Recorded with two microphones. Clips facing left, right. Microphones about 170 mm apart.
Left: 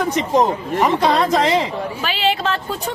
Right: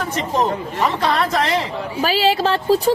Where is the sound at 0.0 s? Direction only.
15° left (ahead or behind).